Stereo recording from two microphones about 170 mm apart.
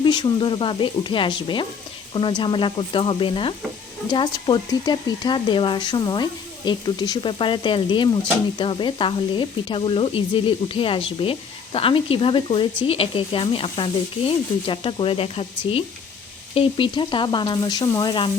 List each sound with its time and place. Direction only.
0.0 s speech: 25° left (ahead or behind)